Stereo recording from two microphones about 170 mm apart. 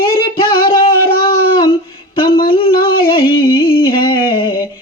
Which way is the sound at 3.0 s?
30° left (ahead or behind).